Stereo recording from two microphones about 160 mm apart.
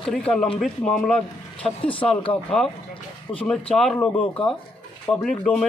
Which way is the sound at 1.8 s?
35° left (ahead or behind).